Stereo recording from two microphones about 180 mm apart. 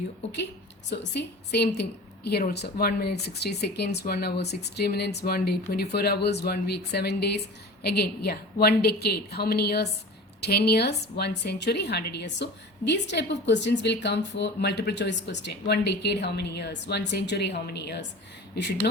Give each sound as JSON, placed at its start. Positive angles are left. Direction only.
{"t": 0.9, "sound": "a woman's voice", "side_deg": 65}